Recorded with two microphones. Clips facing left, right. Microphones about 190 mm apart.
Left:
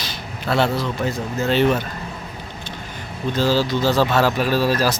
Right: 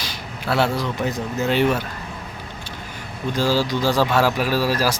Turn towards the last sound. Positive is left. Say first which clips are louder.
# left 2 dB
turn(degrees=-10)  # may be behind; listen again after turning